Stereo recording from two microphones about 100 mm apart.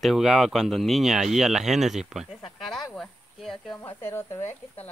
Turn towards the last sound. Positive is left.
turn(degrees=20)  # may be behind; listen again after turning